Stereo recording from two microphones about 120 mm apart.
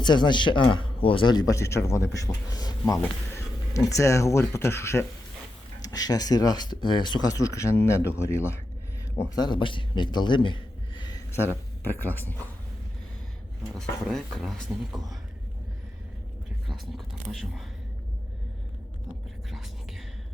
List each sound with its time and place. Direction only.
0.0 s a man's voice: 40° left (ahead or behind); by 5.0 s 20° left (ahead or behind)
5.8 s a man's voice: 30° left (ahead or behind)
9.3 s a man's voice: 35° left (ahead or behind)
11.3 s speech: 20° left (ahead or behind)
13.7 s speech: 5° left (ahead or behind)
16.6 s speech: centre (ahead or behind)
19.5 s whispering: centre (ahead or behind)